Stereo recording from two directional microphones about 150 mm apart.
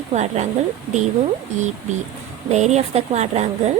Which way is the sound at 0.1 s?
50° right (ahead or behind).